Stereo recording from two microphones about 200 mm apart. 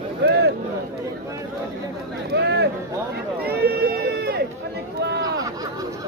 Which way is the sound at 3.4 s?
50° right (ahead or behind).